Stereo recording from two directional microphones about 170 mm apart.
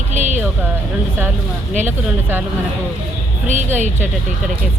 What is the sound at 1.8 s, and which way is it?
Speech, 10° right (ahead or behind).